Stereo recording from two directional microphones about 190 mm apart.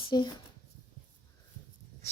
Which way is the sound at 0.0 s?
25° left (ahead or behind).